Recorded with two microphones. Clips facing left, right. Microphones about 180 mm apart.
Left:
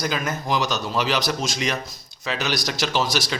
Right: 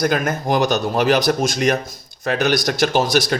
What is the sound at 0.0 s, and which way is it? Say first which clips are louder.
Speech: right 7 dB; 55° right (ahead or behind).